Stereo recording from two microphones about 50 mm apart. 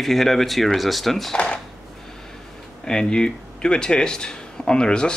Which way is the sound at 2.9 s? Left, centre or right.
Centre.